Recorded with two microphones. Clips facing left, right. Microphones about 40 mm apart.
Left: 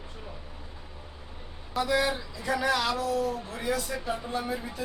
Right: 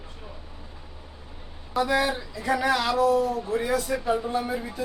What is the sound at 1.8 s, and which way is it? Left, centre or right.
Speech, centre.